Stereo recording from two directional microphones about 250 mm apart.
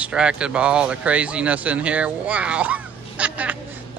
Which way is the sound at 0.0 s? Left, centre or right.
Centre.